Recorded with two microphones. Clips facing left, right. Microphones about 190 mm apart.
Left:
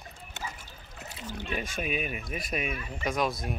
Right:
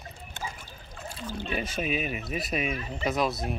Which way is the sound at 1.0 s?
20° left (ahead or behind).